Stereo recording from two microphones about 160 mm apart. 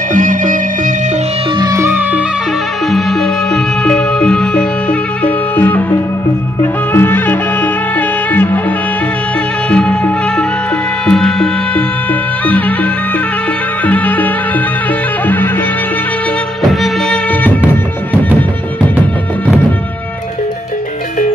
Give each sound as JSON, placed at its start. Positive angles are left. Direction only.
{"t": 0.1, "sound": "music", "side_deg": -55}
{"t": 1.6, "sound": "music", "side_deg": -20}
{"t": 2.9, "sound": "music", "side_deg": 0}
{"t": 16.8, "sound": "music of bollywood", "side_deg": 10}